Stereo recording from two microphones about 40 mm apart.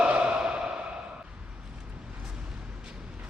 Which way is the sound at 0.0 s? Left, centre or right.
Right.